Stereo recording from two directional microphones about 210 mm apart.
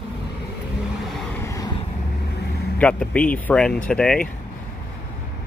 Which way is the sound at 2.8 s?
5° left (ahead or behind).